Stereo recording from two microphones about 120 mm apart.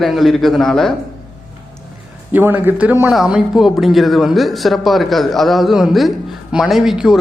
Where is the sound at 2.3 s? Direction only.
15° right (ahead or behind).